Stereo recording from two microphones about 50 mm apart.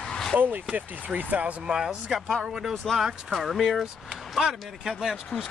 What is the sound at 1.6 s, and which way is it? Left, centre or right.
Speech, centre.